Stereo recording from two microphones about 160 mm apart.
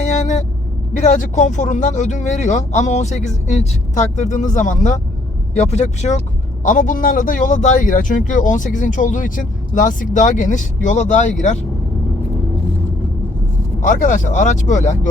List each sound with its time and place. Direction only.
0.0 s vehicle: 45° left (ahead or behind)
0.9 s speech: 50° left (ahead or behind)
13.8 s speech: 55° left (ahead or behind)